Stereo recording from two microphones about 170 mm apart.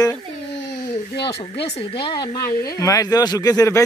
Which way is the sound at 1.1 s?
30° left (ahead or behind).